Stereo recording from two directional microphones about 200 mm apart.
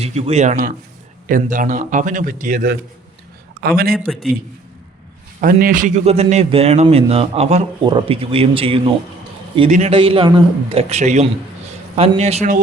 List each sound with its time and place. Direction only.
0.0 s a man's voice: 30° right (ahead or behind); by 3.9 s 50° right (ahead or behind)
3.9 s a man's voice: centre (ahead or behind)
5.4 s a man's voice: 45° right (ahead or behind)